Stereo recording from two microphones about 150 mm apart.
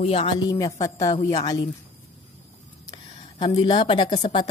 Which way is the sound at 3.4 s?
30° left (ahead or behind).